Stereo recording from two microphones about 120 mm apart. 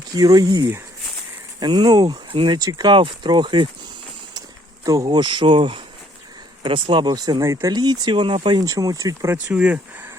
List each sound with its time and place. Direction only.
0.1 s speech: 30° right (ahead or behind)
4.4 s speech: 30° right (ahead or behind)
9.5 s speech: 10° right (ahead or behind)